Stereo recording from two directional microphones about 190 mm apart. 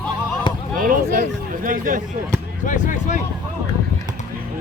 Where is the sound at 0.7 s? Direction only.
45° right (ahead or behind).